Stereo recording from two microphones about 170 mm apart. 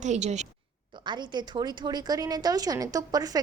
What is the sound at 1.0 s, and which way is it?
A woman's voice, 25° right (ahead or behind).